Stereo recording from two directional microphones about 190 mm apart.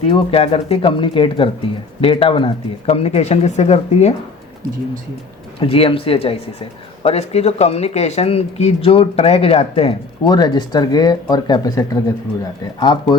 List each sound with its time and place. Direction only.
0.0 s speech: 30° left (ahead or behind)
5.5 s speech: 30° left (ahead or behind)